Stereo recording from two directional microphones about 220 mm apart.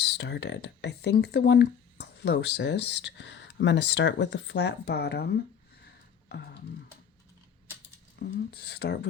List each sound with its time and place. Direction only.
0.0 s speech: 50° left (ahead or behind)
5.8 s a sound: 45° left (ahead or behind)
8.4 s speech: 45° left (ahead or behind)